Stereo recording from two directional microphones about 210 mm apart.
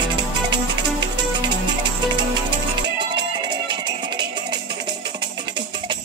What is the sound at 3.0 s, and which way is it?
Music, 20° right (ahead or behind).